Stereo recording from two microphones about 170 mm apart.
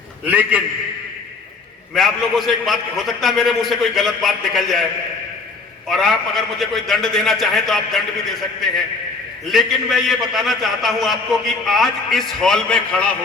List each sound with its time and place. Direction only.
0.3 s a man's voice: 10° right (ahead or behind)
2.0 s a man's voice: centre (ahead or behind)
5.9 s a man's voice: centre (ahead or behind)